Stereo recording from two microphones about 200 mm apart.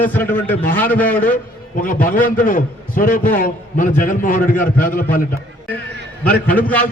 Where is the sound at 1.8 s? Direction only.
45° left (ahead or behind).